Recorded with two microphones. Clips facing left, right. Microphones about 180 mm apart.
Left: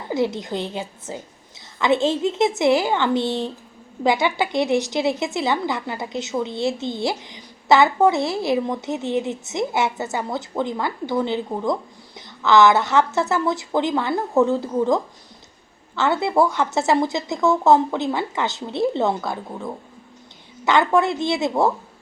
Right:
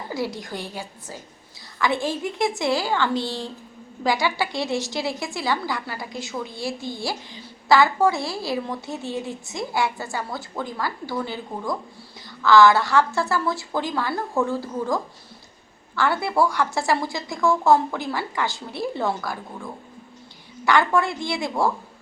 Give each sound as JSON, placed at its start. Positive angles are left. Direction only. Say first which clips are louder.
{"t": 0.1, "sound": "a woman's voice", "louder": "left 7 dB", "side_deg": 20}